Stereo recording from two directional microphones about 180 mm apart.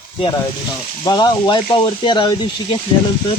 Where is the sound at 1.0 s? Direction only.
25° left (ahead or behind).